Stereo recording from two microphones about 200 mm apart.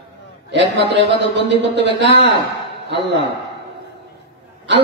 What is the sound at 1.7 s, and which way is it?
Speech, 60° right (ahead or behind).